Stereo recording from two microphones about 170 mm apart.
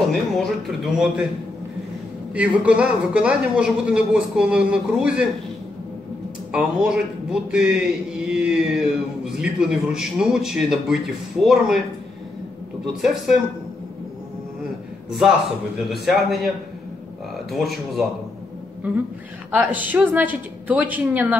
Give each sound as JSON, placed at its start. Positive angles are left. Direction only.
{"t": 0.4, "sound": "mantra", "side_deg": 0}
{"t": 2.3, "sound": "mantra", "side_deg": -5}
{"t": 6.5, "sound": "mantra", "side_deg": -5}
{"t": 13.0, "sound": "mantra", "side_deg": 0}
{"t": 15.0, "sound": "a man's voice", "side_deg": 0}
{"t": 15.9, "sound": "mantra", "side_deg": 0}
{"t": 18.9, "sound": "a woman's voice", "side_deg": -5}